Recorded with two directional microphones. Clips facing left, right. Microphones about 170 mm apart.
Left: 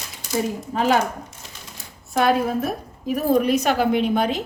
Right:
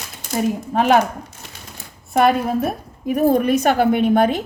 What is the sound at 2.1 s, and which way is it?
A woman's voice, 55° right (ahead or behind).